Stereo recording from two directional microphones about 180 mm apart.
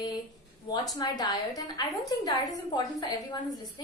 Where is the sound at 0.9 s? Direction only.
20° left (ahead or behind).